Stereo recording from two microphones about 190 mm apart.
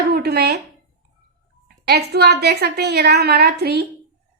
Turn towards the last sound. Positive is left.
turn(degrees=-55)  # may be behind; listen again after turning